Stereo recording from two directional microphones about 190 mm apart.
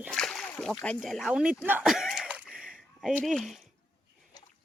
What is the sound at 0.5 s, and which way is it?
Speech, centre (ahead or behind).